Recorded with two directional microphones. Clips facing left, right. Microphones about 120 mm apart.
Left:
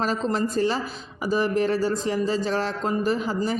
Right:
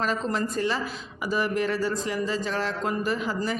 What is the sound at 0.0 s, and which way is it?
A man's voice, 35° left (ahead or behind).